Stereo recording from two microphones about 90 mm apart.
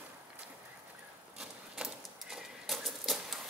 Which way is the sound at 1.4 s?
5° right (ahead or behind).